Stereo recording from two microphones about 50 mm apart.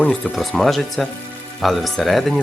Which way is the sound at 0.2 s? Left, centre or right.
Centre.